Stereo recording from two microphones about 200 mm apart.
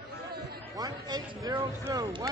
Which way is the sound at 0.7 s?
20° right (ahead or behind).